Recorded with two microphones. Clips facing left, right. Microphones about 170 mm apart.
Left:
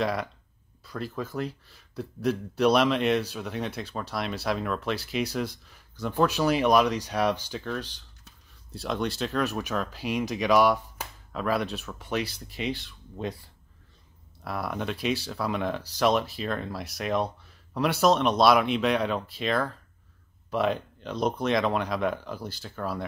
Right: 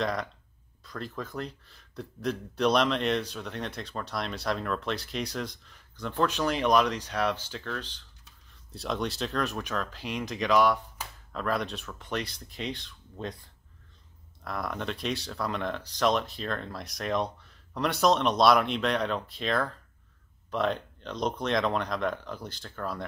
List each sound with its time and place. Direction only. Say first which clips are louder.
0.0 s a man's voice: left 2 dB; 5° left (ahead or behind)
8.7 s a man's voice: left 2 dB; centre (ahead or behind)
14.4 s a man's voice: left 2 dB; 10° left (ahead or behind)